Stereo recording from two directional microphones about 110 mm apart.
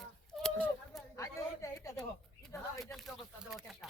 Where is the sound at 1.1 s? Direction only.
30° left (ahead or behind).